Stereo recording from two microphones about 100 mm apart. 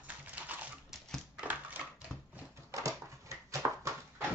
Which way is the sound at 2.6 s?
35° right (ahead or behind).